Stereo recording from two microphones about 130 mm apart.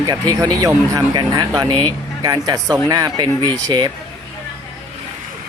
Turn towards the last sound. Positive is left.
turn(degrees=-30)  # may be behind; listen again after turning